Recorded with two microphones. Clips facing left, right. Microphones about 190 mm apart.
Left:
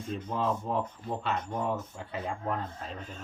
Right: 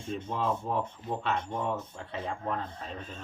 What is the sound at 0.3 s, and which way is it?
Speech, 5° right (ahead or behind).